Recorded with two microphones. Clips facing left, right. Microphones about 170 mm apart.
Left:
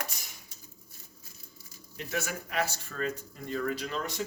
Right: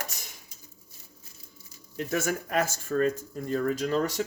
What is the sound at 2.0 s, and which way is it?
A man's voice, 45° right (ahead or behind).